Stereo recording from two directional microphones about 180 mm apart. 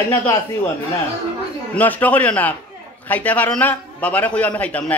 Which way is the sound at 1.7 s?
10° left (ahead or behind).